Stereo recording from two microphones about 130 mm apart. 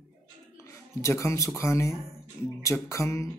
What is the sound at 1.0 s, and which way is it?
Speech, 20° left (ahead or behind).